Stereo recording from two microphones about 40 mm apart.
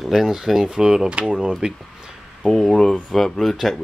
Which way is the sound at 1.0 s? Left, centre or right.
Right.